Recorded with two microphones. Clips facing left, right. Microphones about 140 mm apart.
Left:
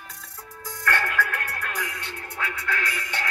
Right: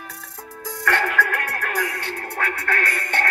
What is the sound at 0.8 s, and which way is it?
Music, 85° right.